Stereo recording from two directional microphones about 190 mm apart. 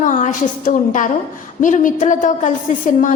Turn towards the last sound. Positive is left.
turn(degrees=45)  # may be behind; listen again after turning